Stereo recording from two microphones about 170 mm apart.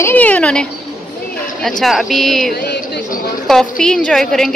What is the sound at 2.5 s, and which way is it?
Speech, 70° left (ahead or behind).